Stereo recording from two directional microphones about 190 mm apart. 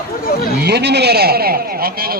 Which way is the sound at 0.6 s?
60° right (ahead or behind).